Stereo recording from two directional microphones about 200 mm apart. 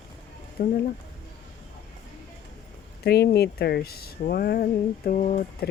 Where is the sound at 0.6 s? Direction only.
50° left (ahead or behind).